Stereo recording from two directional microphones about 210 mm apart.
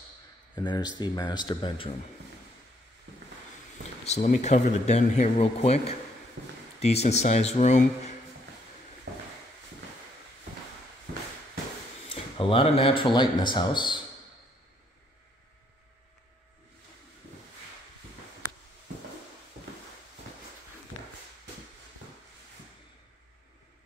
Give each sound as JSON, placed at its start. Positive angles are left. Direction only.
{"t": 0.6, "sound": "speech", "side_deg": 20}
{"t": 4.0, "sound": "speech", "side_deg": 35}
{"t": 6.4, "sound": "speech", "side_deg": -55}
{"t": 6.8, "sound": "speech", "side_deg": 30}
{"t": 12.1, "sound": "speech", "side_deg": 25}